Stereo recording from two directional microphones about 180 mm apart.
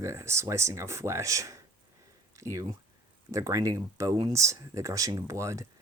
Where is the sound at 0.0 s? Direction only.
15° right (ahead or behind).